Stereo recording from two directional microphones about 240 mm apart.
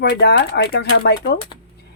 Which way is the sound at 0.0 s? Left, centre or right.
Left.